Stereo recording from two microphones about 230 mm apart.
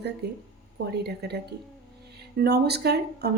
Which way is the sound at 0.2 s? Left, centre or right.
Right.